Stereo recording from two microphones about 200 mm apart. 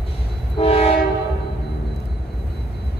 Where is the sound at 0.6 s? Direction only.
30° left (ahead or behind).